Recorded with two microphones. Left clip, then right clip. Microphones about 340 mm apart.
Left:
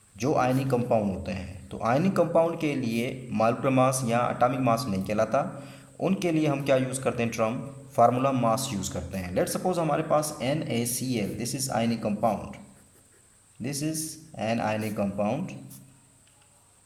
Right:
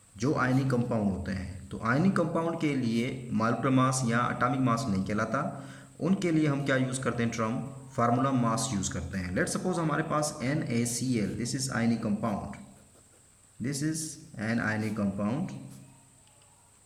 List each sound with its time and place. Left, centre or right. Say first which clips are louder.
0.2 s a man's voice: left 4 dB; centre
13.6 s a man's voice: left 1 dB; centre